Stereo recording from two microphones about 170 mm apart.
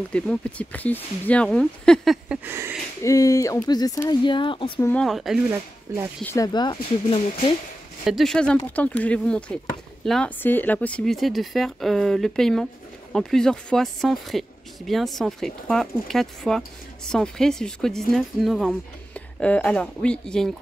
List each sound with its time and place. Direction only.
0.1 s speech: 10° left (ahead or behind)
2.4 s speech: 15° right (ahead or behind)
3.0 s speech: 20° left (ahead or behind)
4.7 s speech: 15° left (ahead or behind)
5.0 s speech: centre (ahead or behind)
5.9 s speech: 15° right (ahead or behind)
6.2 s speech: 20° left (ahead or behind)
8.0 s speech: centre (ahead or behind)